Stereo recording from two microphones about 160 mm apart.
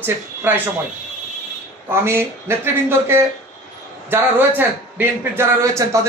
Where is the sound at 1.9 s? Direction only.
15° right (ahead or behind).